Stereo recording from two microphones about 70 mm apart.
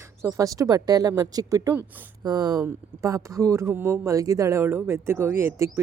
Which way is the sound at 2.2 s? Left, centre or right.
Right.